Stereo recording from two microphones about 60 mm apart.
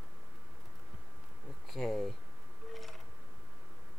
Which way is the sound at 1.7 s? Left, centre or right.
Centre.